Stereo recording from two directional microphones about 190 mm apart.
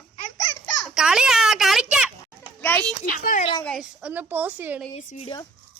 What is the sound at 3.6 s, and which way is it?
A woman's voice, centre (ahead or behind).